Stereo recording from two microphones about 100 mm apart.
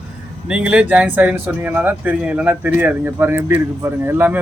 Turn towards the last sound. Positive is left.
turn(degrees=-20)  # may be behind; listen again after turning